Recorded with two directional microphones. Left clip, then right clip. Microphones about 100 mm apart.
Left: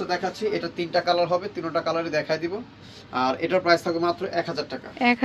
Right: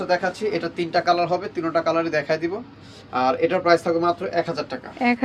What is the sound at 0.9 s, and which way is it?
Speech, 10° right (ahead or behind).